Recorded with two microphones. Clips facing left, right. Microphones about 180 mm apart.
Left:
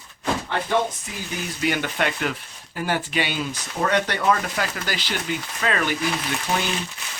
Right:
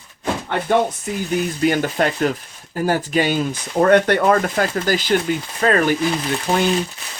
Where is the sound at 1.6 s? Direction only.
40° right (ahead or behind).